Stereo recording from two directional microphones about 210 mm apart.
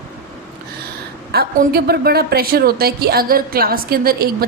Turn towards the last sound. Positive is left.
turn(degrees=-45)  # may be behind; listen again after turning